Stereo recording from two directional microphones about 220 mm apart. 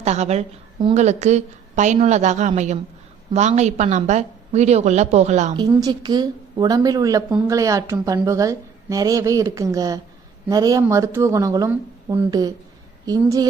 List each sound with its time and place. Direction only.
0.0 s a woman's voice: 30° right (ahead or behind)
5.5 s a woman's voice: 20° right (ahead or behind)